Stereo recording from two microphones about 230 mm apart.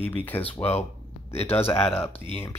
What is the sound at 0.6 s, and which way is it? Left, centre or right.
A man's voice, left.